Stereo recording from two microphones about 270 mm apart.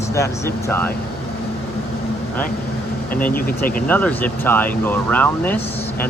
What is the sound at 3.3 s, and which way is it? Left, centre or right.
Speech, left.